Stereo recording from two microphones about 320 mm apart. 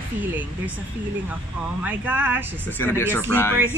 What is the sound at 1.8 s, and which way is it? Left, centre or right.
Speech, centre.